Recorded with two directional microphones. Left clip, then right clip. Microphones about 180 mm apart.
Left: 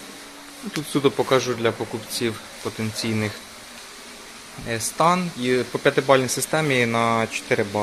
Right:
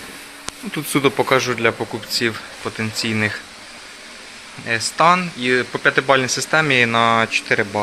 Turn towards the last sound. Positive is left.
turn(degrees=5)  # may be behind; listen again after turning